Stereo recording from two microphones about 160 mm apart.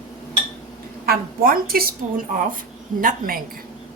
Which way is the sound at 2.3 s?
55° right (ahead or behind).